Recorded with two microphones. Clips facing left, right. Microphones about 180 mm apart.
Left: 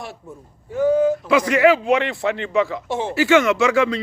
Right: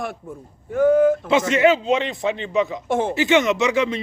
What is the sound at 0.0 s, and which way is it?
Speech, 50° right (ahead or behind).